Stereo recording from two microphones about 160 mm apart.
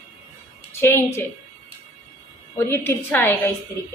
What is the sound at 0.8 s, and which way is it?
Speech, 15° left (ahead or behind).